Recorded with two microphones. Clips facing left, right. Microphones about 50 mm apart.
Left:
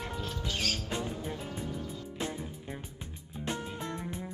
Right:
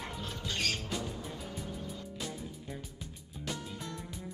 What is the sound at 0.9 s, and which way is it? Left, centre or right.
Music, left.